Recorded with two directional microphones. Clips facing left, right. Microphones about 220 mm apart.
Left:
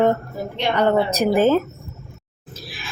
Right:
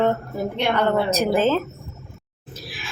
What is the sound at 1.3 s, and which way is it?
Speech, 15° left (ahead or behind).